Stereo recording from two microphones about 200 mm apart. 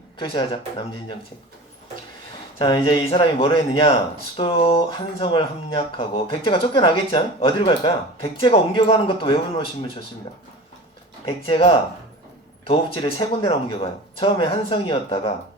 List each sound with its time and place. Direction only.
0.2 s speech: 25° left (ahead or behind)
2.6 s speech: 25° left (ahead or behind)
11.4 s speech: 25° left (ahead or behind)